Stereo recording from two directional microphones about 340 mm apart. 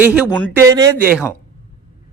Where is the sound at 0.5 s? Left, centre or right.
Centre.